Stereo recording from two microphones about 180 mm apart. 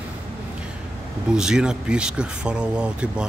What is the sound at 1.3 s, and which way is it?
Speech, 5° right (ahead or behind).